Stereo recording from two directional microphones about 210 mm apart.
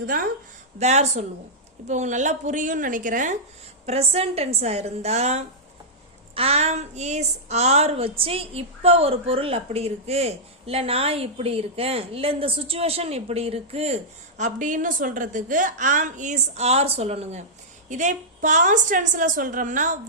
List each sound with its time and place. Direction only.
0.0 s a woman's voice: 40° right (ahead or behind)